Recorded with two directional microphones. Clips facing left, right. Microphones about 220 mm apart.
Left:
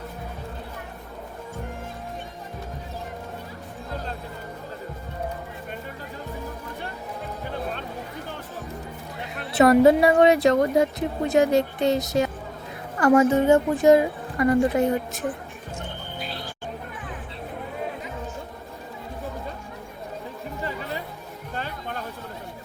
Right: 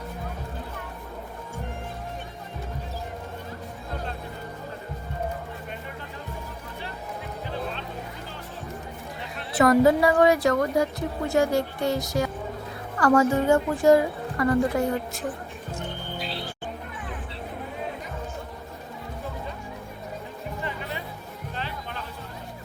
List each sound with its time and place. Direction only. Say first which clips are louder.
9.6 s a woman's voice: left 3 dB; 25° left (ahead or behind)
21.5 s music: left 3 dB; 45° left (ahead or behind)